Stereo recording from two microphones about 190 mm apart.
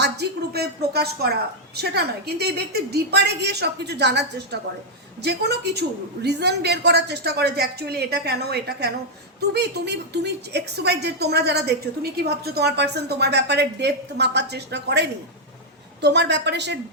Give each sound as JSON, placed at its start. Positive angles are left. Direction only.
{"t": 0.0, "sound": "a woman's voice", "side_deg": -60}